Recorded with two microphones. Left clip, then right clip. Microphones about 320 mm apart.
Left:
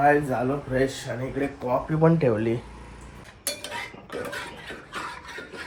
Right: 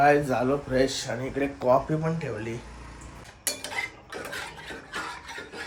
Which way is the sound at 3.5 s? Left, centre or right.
Centre.